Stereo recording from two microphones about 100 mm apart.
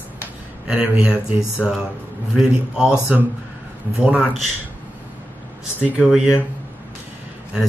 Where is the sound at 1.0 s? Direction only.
5° right (ahead or behind).